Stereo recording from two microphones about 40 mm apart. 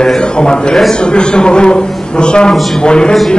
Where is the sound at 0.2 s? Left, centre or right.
Left.